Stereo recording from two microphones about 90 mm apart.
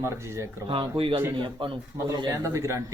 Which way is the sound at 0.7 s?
75° right (ahead or behind).